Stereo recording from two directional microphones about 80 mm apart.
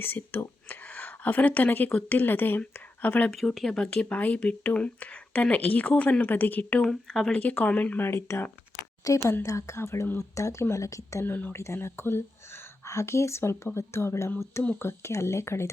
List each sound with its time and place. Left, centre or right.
0.0 s speech: left
3.2 s speech: centre
7.1 s speech: centre
7.3 s speech: centre
8.0 s a woman's voice: left
11.3 s a woman's voice: left